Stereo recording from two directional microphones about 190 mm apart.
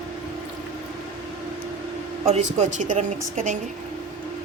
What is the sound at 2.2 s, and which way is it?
Speech, 35° right (ahead or behind).